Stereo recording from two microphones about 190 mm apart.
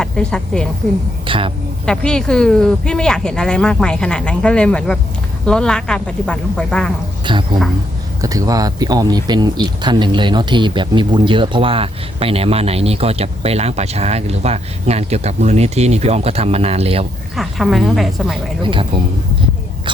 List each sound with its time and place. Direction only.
0.0 s speech: 5° left (ahead or behind)
1.3 s a woman's voice: 30° right (ahead or behind)
1.9 s speech: 5° left (ahead or behind)
7.3 s speech: 25° right (ahead or behind)
17.3 s speech: centre (ahead or behind)
18.6 s speech: 25° right (ahead or behind)